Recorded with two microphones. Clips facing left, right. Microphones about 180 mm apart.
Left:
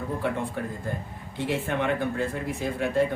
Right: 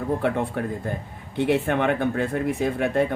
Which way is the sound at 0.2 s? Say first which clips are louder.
Right 4 dB; 60° right (ahead or behind).